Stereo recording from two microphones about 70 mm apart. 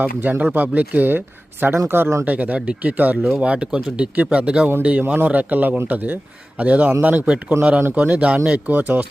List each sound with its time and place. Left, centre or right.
0.0 s speech: right
2.2 s speech: right
7.5 s speech: right
7.9 s speech: right